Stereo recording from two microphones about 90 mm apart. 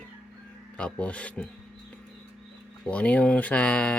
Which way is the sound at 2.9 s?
15° left (ahead or behind).